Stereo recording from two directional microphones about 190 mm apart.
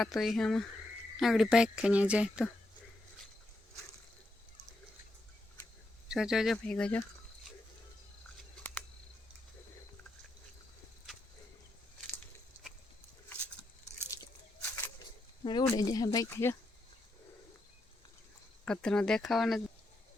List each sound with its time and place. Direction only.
0.0 s speech: centre (ahead or behind)
6.1 s speech: 5° right (ahead or behind)
14.1 s a sound: 15° left (ahead or behind)
15.4 s speech: 20° left (ahead or behind)
18.6 s speech: 5° left (ahead or behind)